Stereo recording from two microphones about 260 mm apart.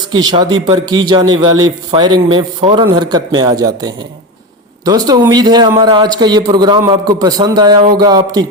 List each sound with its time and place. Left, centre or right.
0.1 s a man's voice: centre